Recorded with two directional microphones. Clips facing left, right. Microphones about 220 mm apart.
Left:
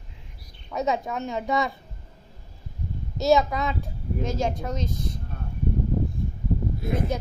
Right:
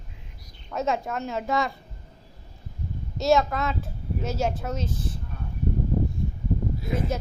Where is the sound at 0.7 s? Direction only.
Centre (ahead or behind).